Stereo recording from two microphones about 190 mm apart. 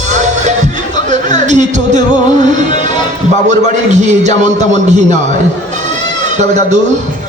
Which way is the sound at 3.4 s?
40° right (ahead or behind).